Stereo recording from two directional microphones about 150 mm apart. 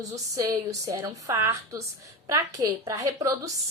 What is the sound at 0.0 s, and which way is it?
A woman's voice, 20° right (ahead or behind).